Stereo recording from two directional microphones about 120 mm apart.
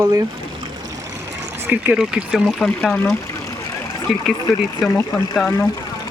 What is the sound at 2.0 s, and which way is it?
Speech, 5° right (ahead or behind).